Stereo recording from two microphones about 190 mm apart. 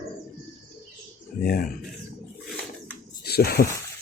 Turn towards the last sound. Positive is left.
turn(degrees=55)  # may be behind; listen again after turning